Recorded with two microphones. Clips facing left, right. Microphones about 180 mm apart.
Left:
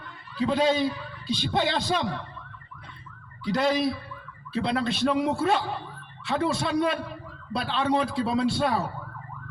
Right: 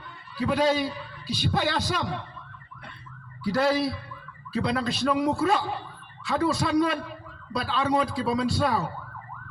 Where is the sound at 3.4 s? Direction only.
20° left (ahead or behind).